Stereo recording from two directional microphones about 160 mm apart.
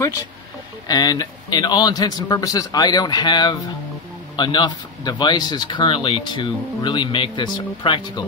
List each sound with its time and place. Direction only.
0.8 s speech: 25° left (ahead or behind)